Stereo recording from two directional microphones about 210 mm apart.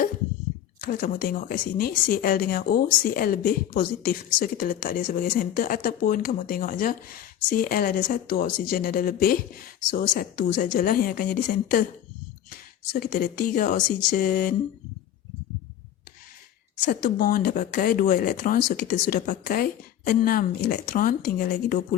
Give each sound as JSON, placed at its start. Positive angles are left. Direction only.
{"t": 0.8, "sound": "a woman's voice", "side_deg": 45}
{"t": 13.0, "sound": "speech", "side_deg": 50}
{"t": 16.8, "sound": "speech", "side_deg": 40}